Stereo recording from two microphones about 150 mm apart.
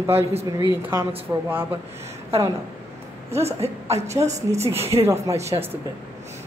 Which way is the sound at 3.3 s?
45° right (ahead or behind).